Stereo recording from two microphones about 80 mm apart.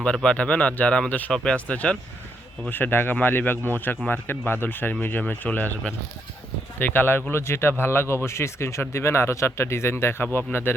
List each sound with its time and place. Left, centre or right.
0.0 s speech: centre
6.7 s speech: left